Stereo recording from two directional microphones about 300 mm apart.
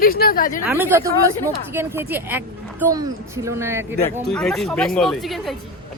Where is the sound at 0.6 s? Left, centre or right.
Centre.